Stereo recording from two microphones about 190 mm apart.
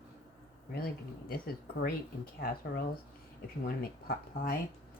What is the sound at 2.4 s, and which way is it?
Speech, 50° left (ahead or behind).